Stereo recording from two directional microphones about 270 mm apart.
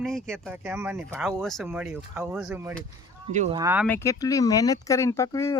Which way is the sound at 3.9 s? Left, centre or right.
Centre.